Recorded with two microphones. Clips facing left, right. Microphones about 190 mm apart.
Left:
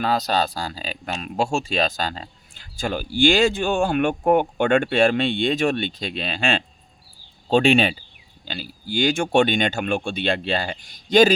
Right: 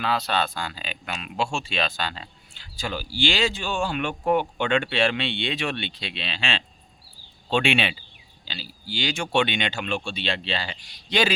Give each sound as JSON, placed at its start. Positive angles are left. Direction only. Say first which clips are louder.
{"t": 0.0, "sound": "speech", "louder": "left 4 dB", "side_deg": 40}
{"t": 8.4, "sound": "speech", "louder": "left 6 dB", "side_deg": 50}